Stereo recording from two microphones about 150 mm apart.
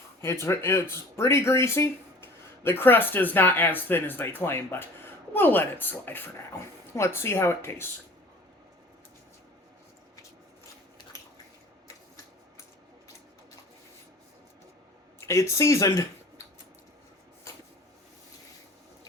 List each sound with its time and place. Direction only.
0.2 s speech: 20° left (ahead or behind)
15.2 s speech: 20° left (ahead or behind)